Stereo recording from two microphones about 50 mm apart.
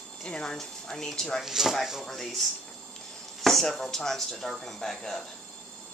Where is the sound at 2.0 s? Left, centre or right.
Centre.